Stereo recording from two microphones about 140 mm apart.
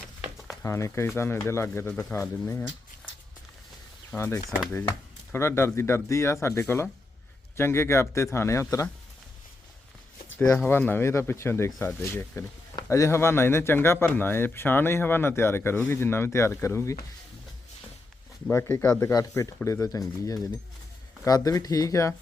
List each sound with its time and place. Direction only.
0.6 s speech: 20° left (ahead or behind)
4.1 s speech: 20° left (ahead or behind)
10.3 s speech: 15° left (ahead or behind)
18.4 s speech: 20° left (ahead or behind)